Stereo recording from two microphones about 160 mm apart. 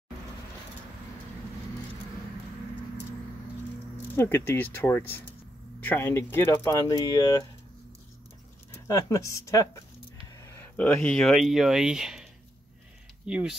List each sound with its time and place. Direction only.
4.1 s speech: 15° left (ahead or behind)
8.7 s speech: 20° left (ahead or behind); by 13.6 s 5° right (ahead or behind)